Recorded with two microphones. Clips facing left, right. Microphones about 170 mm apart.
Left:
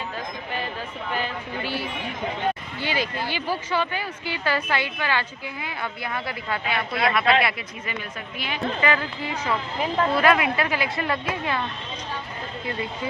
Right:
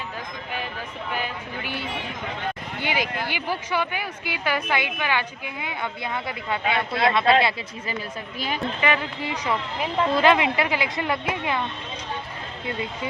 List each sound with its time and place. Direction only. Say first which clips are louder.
1.1 s a woman's voice: left 2 dB; 15° right (ahead or behind)
8.4 s a woman's voice: right 3 dB; 40° right (ahead or behind)
8.8 s a woman's voice: even; 20° right (ahead or behind)
10.2 s a woman's voice: right 2 dB; 25° right (ahead or behind)